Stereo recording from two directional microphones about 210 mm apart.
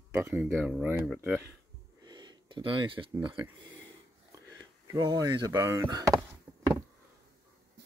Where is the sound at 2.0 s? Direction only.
20° right (ahead or behind).